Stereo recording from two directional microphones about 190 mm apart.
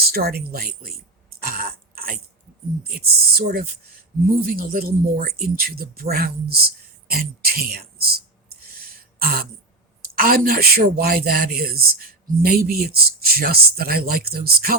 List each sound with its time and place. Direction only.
0.0 s speech: 55° right (ahead or behind)
1.5 s throat clearing: 50° right (ahead or behind)
2.9 s speech: 50° right (ahead or behind)
8.6 s throat clearing: 50° right (ahead or behind)
10.2 s speech: 50° right (ahead or behind)